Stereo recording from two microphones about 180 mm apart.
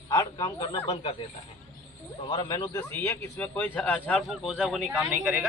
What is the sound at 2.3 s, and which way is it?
Speech, 25° left (ahead or behind).